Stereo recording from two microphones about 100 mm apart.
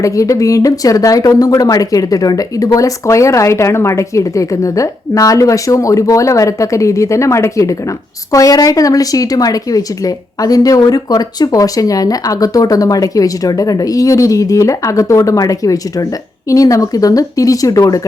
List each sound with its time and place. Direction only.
0.0 s speech: 35° left (ahead or behind)